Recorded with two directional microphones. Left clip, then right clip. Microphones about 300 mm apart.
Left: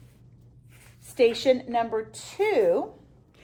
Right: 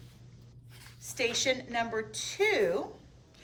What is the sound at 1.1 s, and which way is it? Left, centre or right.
A woman's voice, centre.